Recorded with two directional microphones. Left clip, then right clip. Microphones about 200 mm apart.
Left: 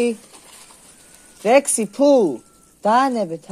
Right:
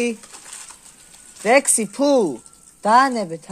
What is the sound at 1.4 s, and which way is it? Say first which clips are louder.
Speech: left 1 dB; 15° right (ahead or behind).